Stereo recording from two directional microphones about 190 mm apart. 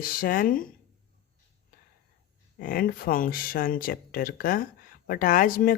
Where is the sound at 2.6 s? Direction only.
45° left (ahead or behind).